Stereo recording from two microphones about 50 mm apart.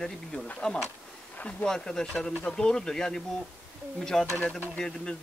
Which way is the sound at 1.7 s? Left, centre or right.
Centre.